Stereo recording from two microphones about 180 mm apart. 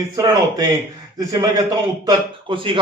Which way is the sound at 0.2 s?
20° right (ahead or behind).